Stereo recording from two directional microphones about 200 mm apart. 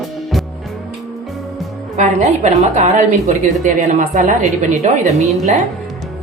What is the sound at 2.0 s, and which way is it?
A woman's voice, 35° right (ahead or behind).